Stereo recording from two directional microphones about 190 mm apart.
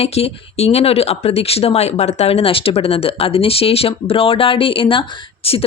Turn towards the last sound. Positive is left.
turn(degrees=30)  # may be behind; listen again after turning